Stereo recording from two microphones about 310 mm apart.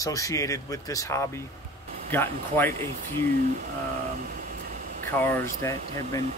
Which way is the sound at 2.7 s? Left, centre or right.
Right.